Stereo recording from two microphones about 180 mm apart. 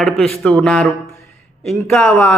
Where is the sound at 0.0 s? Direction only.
5° left (ahead or behind).